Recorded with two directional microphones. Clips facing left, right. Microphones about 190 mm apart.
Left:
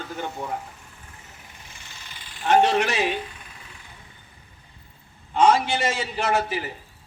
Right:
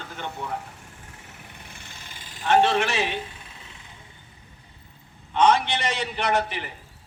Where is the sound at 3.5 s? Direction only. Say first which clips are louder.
Even; 25° right (ahead or behind).